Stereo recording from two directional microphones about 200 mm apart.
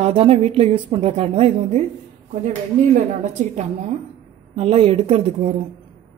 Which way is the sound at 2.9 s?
35° right (ahead or behind).